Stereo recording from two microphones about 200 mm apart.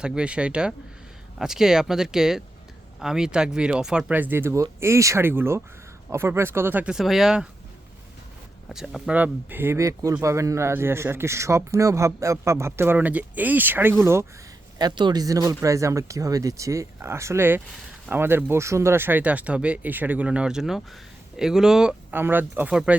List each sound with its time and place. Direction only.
0.0 s speech: 5° right (ahead or behind)
8.7 s speech: 5° right (ahead or behind)